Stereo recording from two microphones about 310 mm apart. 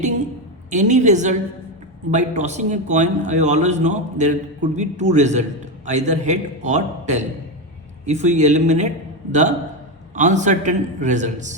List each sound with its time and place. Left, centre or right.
0.7 s a man's voice: right
10.2 s a man's voice: right